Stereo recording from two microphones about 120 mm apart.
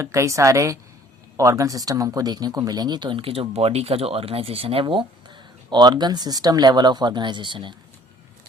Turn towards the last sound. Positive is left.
turn(degrees=-40)  # may be behind; listen again after turning